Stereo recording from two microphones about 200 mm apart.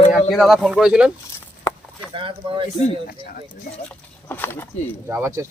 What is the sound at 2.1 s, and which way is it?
Speech, 25° right (ahead or behind).